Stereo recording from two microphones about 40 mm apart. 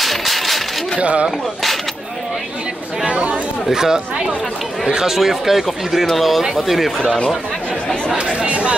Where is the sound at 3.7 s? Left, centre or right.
Centre.